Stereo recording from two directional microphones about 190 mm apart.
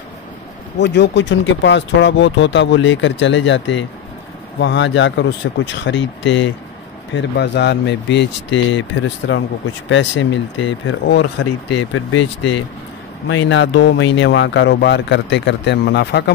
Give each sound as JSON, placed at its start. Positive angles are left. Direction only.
{"t": 0.7, "sound": "speech", "side_deg": 65}
{"t": 13.3, "sound": "speech", "side_deg": 75}